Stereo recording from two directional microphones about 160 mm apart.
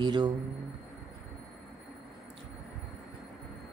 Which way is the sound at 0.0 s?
30° right (ahead or behind).